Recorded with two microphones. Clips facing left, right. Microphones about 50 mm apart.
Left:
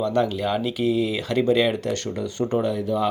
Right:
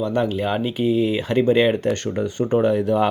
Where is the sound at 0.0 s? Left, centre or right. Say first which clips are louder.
Right 1 dB; centre; by 2.8 s right.